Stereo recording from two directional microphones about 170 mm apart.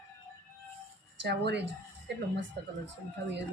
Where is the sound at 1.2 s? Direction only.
85° right.